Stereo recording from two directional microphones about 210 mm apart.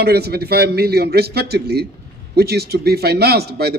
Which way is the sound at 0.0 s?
50° right (ahead or behind).